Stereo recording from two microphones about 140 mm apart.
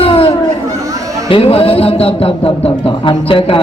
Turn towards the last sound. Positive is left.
turn(degrees=40)  # may be behind; listen again after turning